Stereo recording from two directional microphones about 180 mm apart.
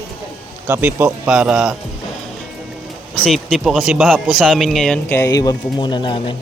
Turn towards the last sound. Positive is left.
turn(degrees=25)  # may be behind; listen again after turning